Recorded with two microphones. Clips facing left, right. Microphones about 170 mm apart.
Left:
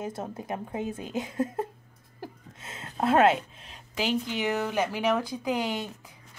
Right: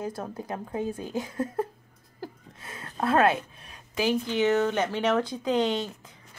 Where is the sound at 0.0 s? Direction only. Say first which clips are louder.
Right 1 dB; 25° left (ahead or behind).